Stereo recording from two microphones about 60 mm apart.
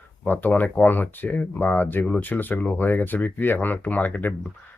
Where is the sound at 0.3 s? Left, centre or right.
Left.